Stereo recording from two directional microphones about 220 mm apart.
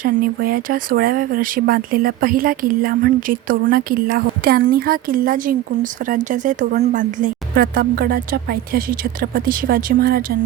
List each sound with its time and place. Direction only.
0.0 s speech: 40° right (ahead or behind)